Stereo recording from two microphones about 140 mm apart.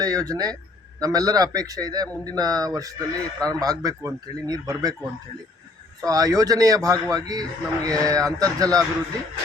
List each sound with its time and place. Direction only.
0.0 s a man's voice: 25° right (ahead or behind)
6.1 s a man's voice: 25° right (ahead or behind)